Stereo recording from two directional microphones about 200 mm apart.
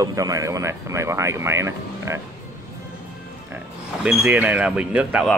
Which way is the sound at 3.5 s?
5° right (ahead or behind).